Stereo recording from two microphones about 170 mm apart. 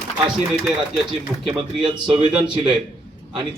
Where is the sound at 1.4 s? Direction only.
30° right (ahead or behind).